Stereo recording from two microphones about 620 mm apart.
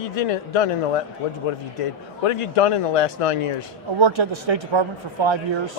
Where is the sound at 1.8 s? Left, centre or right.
Left.